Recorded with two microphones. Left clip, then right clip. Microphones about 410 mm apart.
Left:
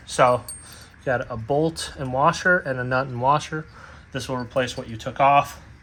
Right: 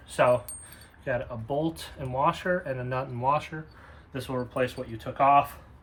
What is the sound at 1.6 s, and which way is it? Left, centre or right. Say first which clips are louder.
Speech: left 7 dB; centre.